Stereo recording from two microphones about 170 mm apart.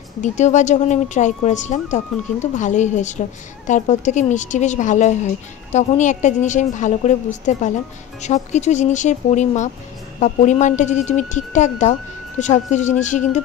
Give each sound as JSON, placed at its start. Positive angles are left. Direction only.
{"t": 0.2, "sound": "a woman's voice", "side_deg": 45}